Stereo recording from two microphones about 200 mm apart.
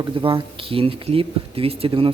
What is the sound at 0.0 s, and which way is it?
Speech, 25° right (ahead or behind).